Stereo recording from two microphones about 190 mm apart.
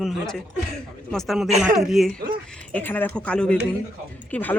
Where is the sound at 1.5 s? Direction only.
35° right (ahead or behind).